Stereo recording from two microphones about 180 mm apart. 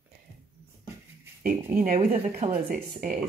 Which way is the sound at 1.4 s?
50° right (ahead or behind).